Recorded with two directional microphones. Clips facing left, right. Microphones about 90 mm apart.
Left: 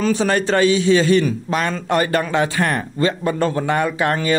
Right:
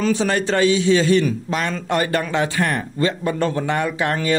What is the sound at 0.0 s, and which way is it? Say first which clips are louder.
A man's voice: left 1 dB; 45° left (ahead or behind).